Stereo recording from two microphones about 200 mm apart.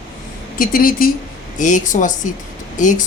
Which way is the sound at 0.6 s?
45° left (ahead or behind).